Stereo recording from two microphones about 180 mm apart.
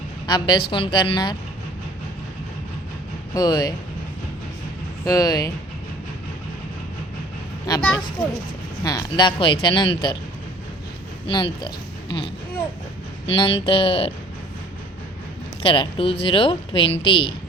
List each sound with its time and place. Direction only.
0.3 s speech: 25° left (ahead or behind)
3.3 s speech: 20° left (ahead or behind)
5.0 s speech: 20° left (ahead or behind)
7.7 s speech: 20° left (ahead or behind)
11.3 s a woman's voice: 25° left (ahead or behind)
15.6 s speech: 30° left (ahead or behind)